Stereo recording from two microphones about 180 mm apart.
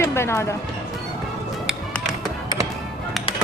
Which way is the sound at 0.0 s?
15° left (ahead or behind).